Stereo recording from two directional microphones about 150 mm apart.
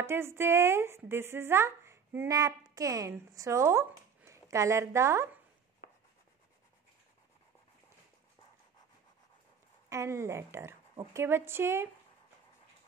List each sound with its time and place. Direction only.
0.0 s speech: 15° right (ahead or behind)
9.8 s a woman's voice: 20° right (ahead or behind)